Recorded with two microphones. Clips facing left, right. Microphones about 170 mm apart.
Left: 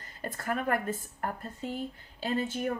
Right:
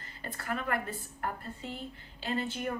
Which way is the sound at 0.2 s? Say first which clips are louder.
Left 4 dB; 45° left (ahead or behind).